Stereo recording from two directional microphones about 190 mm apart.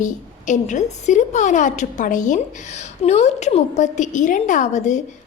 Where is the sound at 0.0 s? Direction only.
40° left (ahead or behind).